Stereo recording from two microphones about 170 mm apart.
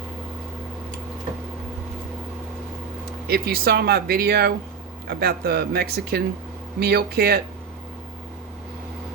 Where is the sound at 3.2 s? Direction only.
65° right (ahead or behind).